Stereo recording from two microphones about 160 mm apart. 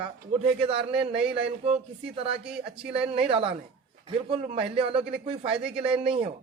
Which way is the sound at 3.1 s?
35° right (ahead or behind).